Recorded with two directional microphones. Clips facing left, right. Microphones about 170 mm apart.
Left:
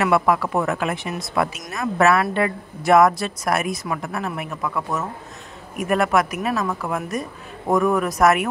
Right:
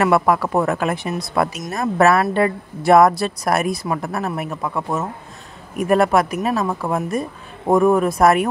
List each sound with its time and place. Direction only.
0.0 s a woman's voice: 40° right (ahead or behind)